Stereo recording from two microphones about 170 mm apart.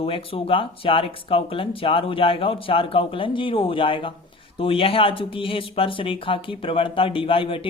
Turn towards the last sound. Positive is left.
turn(degrees=30)  # may be behind; listen again after turning